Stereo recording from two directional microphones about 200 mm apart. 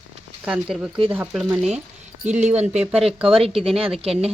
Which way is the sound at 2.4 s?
35° right (ahead or behind).